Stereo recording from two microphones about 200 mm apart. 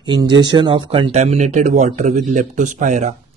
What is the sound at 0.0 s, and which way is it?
Speech, 20° right (ahead or behind).